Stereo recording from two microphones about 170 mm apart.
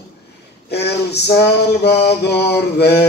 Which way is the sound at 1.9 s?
75° left (ahead or behind).